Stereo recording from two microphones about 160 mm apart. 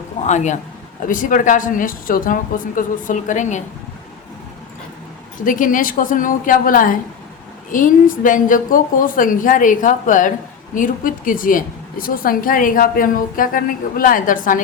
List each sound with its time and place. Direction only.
0.3 s a man's voice: 50° left (ahead or behind)
5.5 s a woman's voice: 55° left (ahead or behind)